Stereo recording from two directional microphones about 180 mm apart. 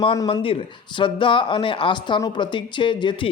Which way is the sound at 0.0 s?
30° left (ahead or behind).